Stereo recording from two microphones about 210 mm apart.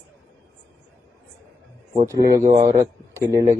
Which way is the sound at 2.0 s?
15° right (ahead or behind).